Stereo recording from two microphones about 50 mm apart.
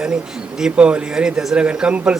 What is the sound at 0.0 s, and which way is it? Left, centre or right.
Speech, centre.